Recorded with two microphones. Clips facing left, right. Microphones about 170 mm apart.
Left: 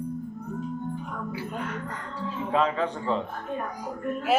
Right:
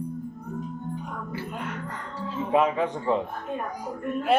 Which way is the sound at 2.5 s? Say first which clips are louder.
Right 3 dB; 15° right (ahead or behind).